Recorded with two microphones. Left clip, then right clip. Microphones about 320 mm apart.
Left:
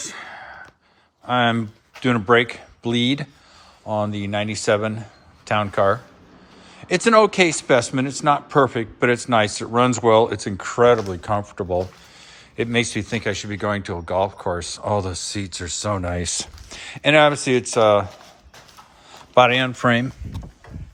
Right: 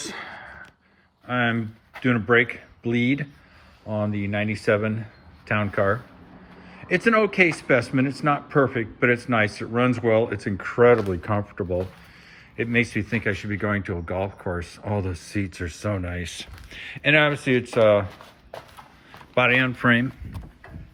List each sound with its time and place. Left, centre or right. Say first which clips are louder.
0.0 s a sound: left 1 dB; centre
1.3 s speech: left 5 dB; centre
7.3 s speech: left 2 dB; left
8.2 s a man's voice: left 6 dB; centre
15.9 s speech: left 6 dB; left
16.6 s speech: left 2 dB; centre
19.3 s speech: left 5 dB; centre